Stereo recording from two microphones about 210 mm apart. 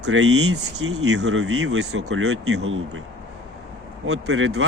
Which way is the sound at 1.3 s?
80° right.